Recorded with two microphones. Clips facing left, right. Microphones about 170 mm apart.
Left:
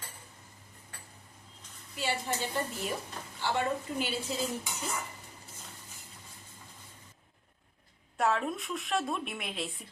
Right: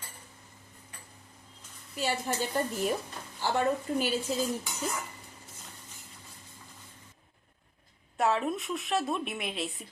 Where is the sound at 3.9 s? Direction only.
45° right (ahead or behind).